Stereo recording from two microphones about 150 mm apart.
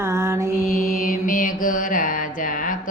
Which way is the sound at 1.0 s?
65° left (ahead or behind).